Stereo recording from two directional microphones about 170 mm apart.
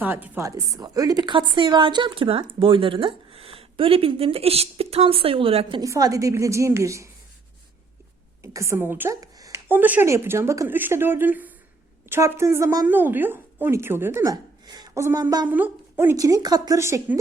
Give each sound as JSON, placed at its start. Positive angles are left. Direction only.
{"t": 0.0, "sound": "a woman's voice", "side_deg": -10}
{"t": 5.8, "sound": "a woman's voice", "side_deg": -20}
{"t": 8.4, "sound": "a woman's voice", "side_deg": -15}
{"t": 15.4, "sound": "a woman's voice", "side_deg": -10}